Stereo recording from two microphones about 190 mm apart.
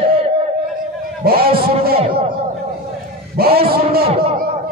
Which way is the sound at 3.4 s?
55° right (ahead or behind).